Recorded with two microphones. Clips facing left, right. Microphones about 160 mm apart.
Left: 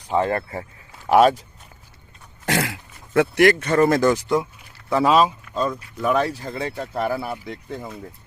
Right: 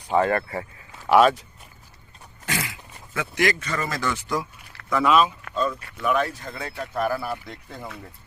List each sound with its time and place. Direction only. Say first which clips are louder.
0.1 s speech: even; 25° left (ahead or behind)
1.0 s speech: left 2 dB; 40° left (ahead or behind)
2.5 s throat clearing: left 7 dB; 75° left (ahead or behind)
3.2 s speech: left 9 dB; 60° left (ahead or behind)
4.1 s speech: left 7 dB; 35° left (ahead or behind)